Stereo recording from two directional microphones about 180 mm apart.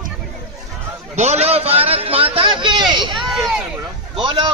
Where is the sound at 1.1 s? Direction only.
40° right (ahead or behind).